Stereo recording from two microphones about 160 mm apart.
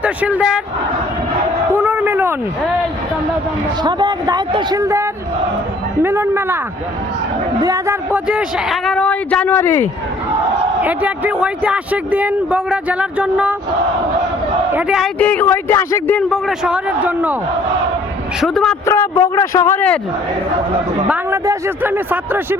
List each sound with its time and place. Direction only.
0.0 s a man's voice: 10° right (ahead or behind)
1.7 s a sound: 15° right (ahead or behind)
3.8 s a man's voice: 25° right (ahead or behind)
7.6 s a woman's voice: 20° right (ahead or behind); by 9.9 s 15° left (ahead or behind)
10.8 s a man's voice: 10° right (ahead or behind)
14.7 s a man's voice: 5° right (ahead or behind)
15.2 s a man's voice: 10° left (ahead or behind)
16.3 s a man's voice: 5° right (ahead or behind)
18.3 s a woman's voice: centre (ahead or behind)
18.9 s a man's voice: 20° left (ahead or behind)
21.1 s a man's voice: 15° right (ahead or behind)